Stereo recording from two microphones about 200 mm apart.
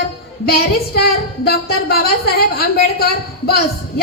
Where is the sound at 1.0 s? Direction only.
50° left (ahead or behind).